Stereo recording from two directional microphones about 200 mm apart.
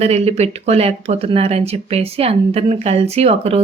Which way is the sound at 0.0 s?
30° right (ahead or behind).